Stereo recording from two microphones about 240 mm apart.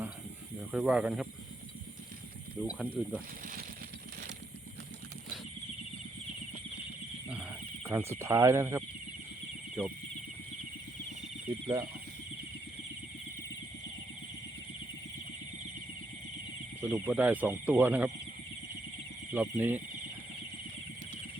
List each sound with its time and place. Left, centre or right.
0.7 s speech: centre
2.6 s speech: centre
3.4 s speech: right
7.3 s a sound: centre
11.6 s speech: right
16.8 s speech: centre
19.3 s speech: centre